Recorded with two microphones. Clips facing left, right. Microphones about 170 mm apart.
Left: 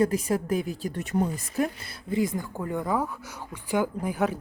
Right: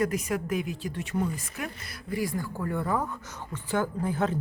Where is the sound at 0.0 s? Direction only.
30° left (ahead or behind).